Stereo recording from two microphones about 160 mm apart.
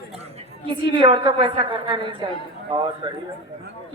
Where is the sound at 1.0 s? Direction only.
30° right (ahead or behind).